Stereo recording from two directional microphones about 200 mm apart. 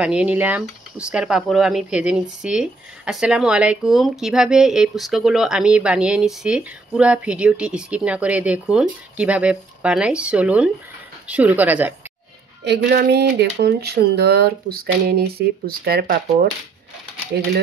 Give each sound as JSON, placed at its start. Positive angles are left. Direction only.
{"t": 0.0, "sound": "speech", "side_deg": -5}
{"t": 12.6, "sound": "speech", "side_deg": -55}